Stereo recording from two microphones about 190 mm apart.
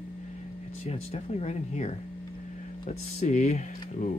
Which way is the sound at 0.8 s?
35° left (ahead or behind).